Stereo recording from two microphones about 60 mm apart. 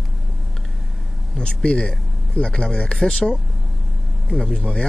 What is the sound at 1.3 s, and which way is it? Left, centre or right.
Speech, centre.